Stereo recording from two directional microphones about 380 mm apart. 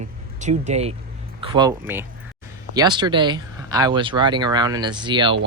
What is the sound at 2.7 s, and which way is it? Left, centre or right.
Speech, centre.